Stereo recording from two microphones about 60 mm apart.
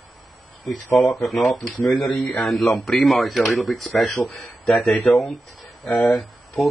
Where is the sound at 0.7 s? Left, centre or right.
Centre.